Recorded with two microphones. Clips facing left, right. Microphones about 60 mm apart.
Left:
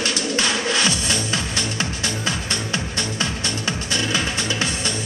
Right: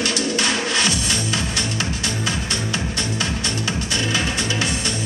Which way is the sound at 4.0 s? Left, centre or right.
Right.